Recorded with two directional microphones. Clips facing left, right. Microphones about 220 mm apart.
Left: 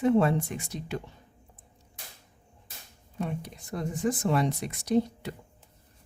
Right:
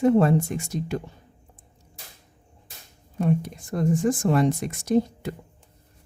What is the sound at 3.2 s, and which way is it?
Speech, 50° right (ahead or behind).